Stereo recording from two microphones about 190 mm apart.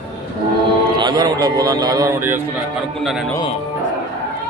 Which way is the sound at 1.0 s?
20° right (ahead or behind).